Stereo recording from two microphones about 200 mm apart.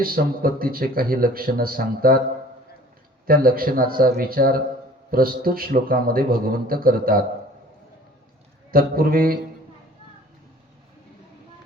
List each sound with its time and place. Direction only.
0.0 s speech: 45° right (ahead or behind)
3.2 s speech: 45° right (ahead or behind)
8.7 s speech: 45° right (ahead or behind)